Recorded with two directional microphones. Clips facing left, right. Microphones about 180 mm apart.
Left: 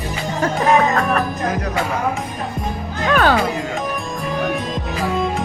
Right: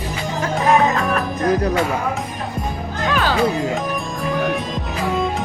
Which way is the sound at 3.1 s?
55° left (ahead or behind).